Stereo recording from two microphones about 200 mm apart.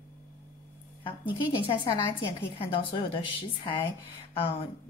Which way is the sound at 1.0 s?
25° left (ahead or behind).